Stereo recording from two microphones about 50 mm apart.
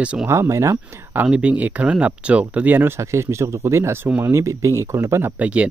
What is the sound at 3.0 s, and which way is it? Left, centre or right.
Speech, right.